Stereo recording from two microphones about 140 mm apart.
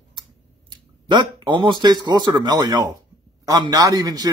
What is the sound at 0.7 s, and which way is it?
Speech, 30° right (ahead or behind).